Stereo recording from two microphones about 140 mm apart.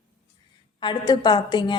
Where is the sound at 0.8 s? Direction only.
30° left (ahead or behind).